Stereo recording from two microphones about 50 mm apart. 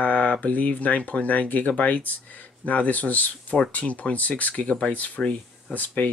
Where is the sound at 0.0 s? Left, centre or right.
Left.